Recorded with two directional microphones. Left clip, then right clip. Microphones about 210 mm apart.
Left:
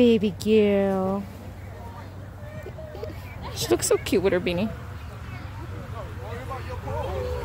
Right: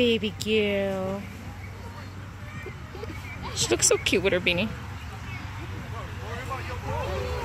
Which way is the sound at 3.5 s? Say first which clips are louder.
Left 1 dB; 25° left (ahead or behind).